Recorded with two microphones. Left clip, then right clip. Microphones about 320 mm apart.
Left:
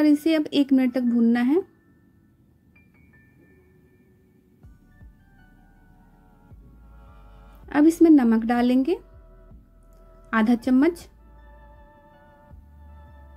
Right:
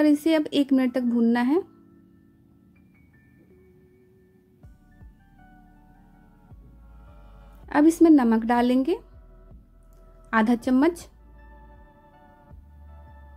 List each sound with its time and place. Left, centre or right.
0.0 s a woman's voice: centre
7.6 s a woman's voice: centre
10.3 s a woman's voice: centre